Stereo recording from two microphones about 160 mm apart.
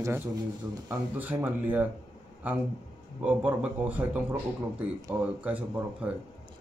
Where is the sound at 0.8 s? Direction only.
10° right (ahead or behind).